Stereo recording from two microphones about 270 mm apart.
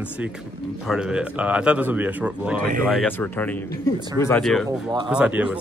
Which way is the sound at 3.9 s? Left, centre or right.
Centre.